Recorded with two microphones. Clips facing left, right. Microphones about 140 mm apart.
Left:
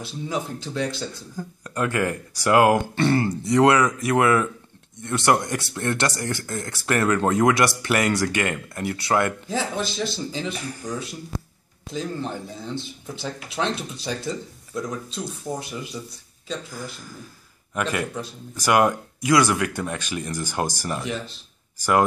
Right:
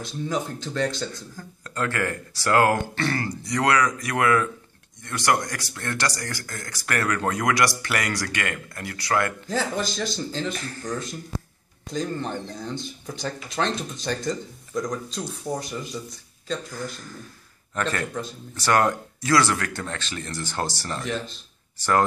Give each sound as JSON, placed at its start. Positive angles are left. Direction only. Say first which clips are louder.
{"t": 0.0, "sound": "speech", "louder": "right 1 dB", "side_deg": 5}
{"t": 9.5, "sound": "speech", "louder": "even", "side_deg": 5}